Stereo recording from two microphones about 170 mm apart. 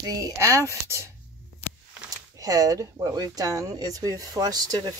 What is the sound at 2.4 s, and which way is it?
Speech, 20° right (ahead or behind).